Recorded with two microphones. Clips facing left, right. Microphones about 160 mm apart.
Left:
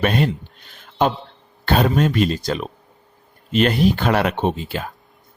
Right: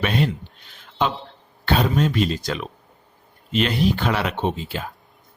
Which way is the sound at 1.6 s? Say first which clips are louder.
Left 3 dB; 50° left (ahead or behind).